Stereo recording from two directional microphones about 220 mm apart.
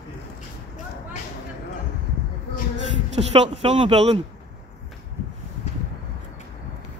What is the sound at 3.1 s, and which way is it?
A woman's voice, 30° right (ahead or behind).